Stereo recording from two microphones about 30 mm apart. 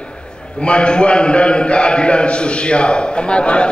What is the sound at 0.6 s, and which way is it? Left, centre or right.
A man's voice, left.